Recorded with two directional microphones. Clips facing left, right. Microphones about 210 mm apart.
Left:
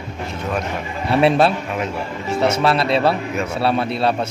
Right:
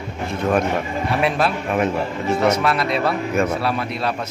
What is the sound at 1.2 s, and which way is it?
A man's voice, 30° left (ahead or behind).